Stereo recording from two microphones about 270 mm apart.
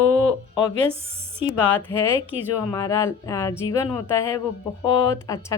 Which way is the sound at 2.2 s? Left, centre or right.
Centre.